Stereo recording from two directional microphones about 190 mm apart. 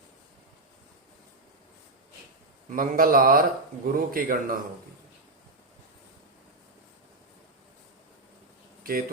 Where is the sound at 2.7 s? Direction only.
50° right (ahead or behind).